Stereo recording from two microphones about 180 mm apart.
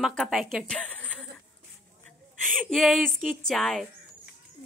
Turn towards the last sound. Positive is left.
turn(degrees=0)  # may be behind; listen again after turning